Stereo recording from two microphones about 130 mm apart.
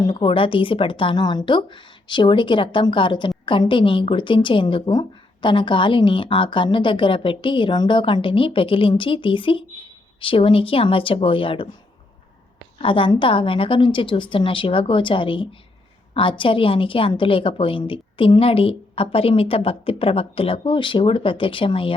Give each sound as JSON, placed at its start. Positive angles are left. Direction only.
{"t": 0.0, "sound": "a woman's voice", "side_deg": 40}
{"t": 12.8, "sound": "a woman's voice", "side_deg": 40}